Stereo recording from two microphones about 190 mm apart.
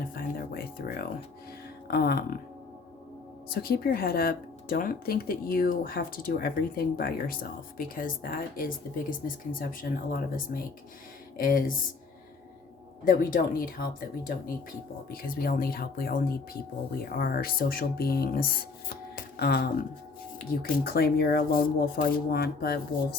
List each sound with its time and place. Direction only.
0.0 s a sound: 50° left (ahead or behind)
1.9 s speech: 55° left (ahead or behind)
3.5 s speech: 50° left (ahead or behind)
13.1 s speech: 45° left (ahead or behind)